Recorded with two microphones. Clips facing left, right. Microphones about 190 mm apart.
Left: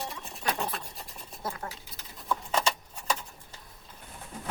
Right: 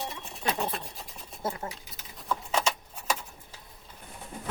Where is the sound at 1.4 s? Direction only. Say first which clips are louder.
Right 3 dB; 25° right (ahead or behind).